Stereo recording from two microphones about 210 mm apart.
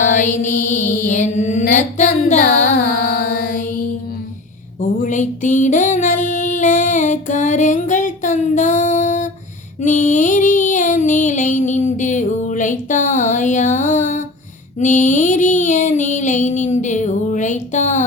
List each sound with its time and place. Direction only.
0.0 s mantra: 40° left (ahead or behind)
2.8 s music: 45° left (ahead or behind)
4.8 s child singing: 35° left (ahead or behind)
9.8 s music: 35° left (ahead or behind)